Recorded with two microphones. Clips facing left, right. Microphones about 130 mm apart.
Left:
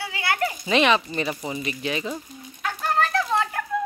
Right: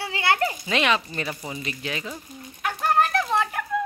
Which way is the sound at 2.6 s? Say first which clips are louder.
Right 2 dB; 15° right (ahead or behind).